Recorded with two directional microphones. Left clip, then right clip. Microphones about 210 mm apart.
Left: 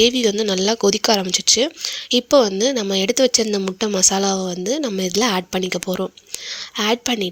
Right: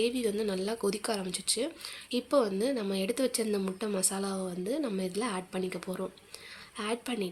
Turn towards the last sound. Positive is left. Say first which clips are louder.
# left 14 dB
turn(degrees=35)  # may be behind; listen again after turning